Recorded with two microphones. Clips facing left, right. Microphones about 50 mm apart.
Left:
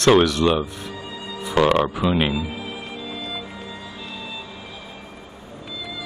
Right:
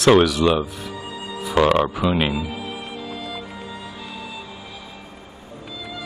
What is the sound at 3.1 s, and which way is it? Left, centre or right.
Music, right.